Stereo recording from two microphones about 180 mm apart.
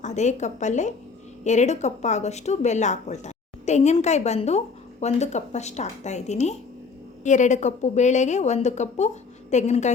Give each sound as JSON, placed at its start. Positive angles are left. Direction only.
{"t": 0.0, "sound": "speech", "side_deg": 40}